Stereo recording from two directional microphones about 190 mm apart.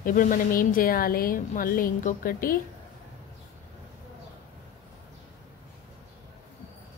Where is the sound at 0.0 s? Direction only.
45° left (ahead or behind).